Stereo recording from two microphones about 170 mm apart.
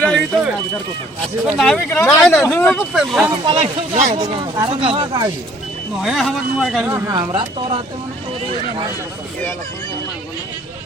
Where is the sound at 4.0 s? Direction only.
45° right (ahead or behind).